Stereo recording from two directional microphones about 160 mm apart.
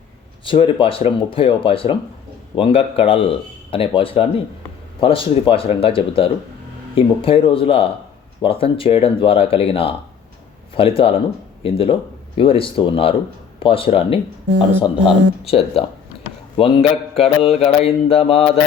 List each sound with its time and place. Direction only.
0.4 s mantra: 30° left (ahead or behind)